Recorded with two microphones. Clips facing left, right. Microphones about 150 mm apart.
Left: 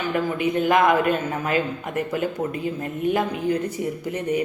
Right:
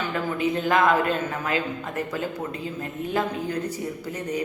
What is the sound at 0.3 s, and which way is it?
Speech, 15° left (ahead or behind).